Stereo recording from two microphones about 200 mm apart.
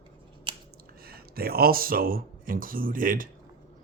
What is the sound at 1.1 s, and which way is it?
Speech, 50° right (ahead or behind).